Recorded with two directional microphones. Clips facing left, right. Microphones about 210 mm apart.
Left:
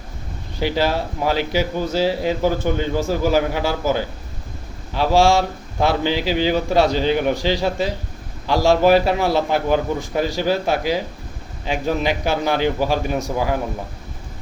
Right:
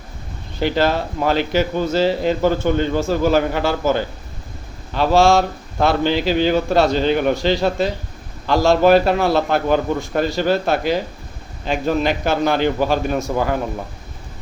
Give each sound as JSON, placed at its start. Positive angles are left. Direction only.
{"t": 0.6, "sound": "a man's voice", "side_deg": 10}